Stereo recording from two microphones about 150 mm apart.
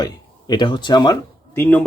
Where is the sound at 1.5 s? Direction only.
15° left (ahead or behind).